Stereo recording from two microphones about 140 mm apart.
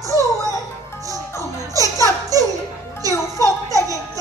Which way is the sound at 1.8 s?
25° right (ahead or behind).